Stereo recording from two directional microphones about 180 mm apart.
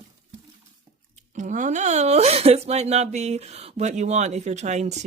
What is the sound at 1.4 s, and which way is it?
Speech, 45° right (ahead or behind).